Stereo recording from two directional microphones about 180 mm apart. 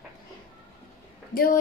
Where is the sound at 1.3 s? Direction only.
55° left (ahead or behind).